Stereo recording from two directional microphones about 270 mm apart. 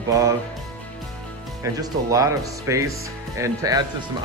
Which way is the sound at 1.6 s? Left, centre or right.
Centre.